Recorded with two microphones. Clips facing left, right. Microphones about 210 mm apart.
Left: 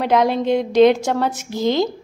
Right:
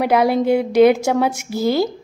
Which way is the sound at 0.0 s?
10° right (ahead or behind).